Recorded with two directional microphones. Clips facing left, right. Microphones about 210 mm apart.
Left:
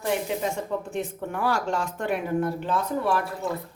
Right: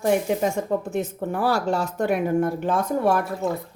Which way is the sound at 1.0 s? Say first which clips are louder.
Right 4 dB; 35° right (ahead or behind).